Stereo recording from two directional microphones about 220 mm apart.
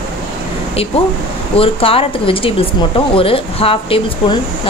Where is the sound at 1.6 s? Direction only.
25° left (ahead or behind).